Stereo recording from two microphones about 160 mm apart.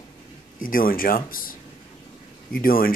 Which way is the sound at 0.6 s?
60° left (ahead or behind).